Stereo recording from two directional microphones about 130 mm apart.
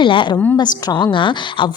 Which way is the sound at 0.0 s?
40° left (ahead or behind).